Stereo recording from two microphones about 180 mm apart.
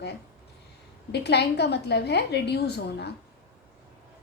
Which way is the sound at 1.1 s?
65° left (ahead or behind).